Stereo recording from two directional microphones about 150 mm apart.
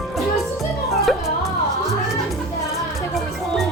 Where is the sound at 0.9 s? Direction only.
Centre (ahead or behind).